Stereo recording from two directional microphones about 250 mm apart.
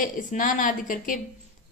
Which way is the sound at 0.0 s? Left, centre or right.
Left.